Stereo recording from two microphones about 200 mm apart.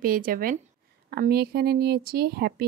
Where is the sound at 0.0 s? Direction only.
45° right (ahead or behind).